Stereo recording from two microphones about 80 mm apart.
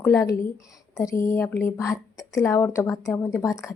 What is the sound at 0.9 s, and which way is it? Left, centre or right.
A woman's voice, left.